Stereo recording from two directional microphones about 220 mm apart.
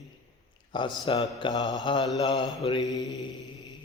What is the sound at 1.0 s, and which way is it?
Mantra, 25° left (ahead or behind).